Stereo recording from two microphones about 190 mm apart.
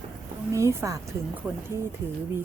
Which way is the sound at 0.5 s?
15° right (ahead or behind).